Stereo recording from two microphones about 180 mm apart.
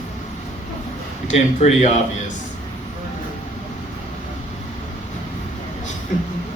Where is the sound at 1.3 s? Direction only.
40° left (ahead or behind).